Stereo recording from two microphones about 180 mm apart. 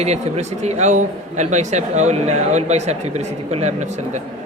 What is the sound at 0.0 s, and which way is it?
Speech, 40° right (ahead or behind).